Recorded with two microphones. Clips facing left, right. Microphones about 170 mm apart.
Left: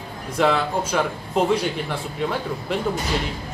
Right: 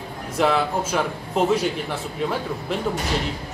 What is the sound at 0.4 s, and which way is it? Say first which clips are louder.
Speech: even; 5° right (ahead or behind).